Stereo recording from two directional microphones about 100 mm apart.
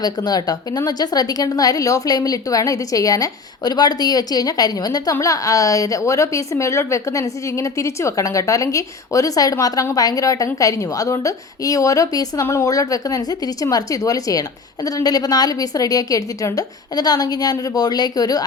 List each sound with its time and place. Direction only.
0.0 s a woman's voice: 40° left (ahead or behind)